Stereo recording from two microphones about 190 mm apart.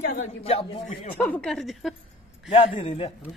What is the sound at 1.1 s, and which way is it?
Speech, 10° left (ahead or behind).